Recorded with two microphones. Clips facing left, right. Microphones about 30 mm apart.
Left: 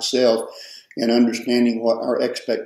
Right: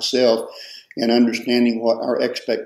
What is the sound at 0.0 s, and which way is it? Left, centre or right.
Speech, centre.